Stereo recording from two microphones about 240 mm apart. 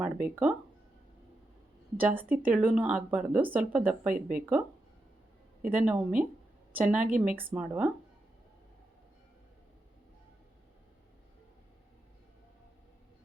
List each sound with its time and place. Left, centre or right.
0.0 s speech: centre
2.0 s speech: centre
5.7 s speech: centre
7.0 s speech: right
7.5 s speech: centre